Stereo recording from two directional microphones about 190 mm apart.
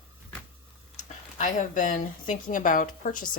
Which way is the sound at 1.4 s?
40° left (ahead or behind).